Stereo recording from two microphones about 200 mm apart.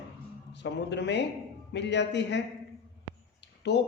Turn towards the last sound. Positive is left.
turn(degrees=60)  # may be behind; listen again after turning